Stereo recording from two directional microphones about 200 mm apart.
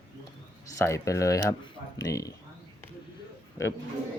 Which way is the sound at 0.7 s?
15° left (ahead or behind).